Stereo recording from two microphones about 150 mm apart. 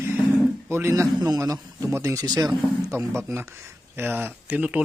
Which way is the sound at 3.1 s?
15° right (ahead or behind).